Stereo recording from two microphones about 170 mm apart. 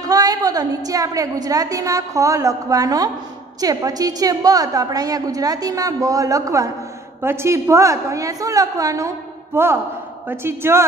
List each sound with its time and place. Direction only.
0.1 s a woman's voice: 20° right (ahead or behind)